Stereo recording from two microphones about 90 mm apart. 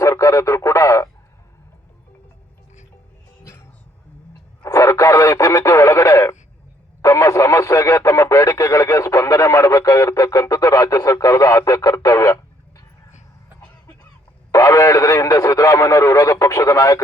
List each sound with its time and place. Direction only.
0.0 s speech: 35° left (ahead or behind)
3.4 s music: 30° left (ahead or behind)
4.6 s speech: 35° left (ahead or behind)
12.0 s a sound: 40° left (ahead or behind)
14.5 s speech: 40° left (ahead or behind)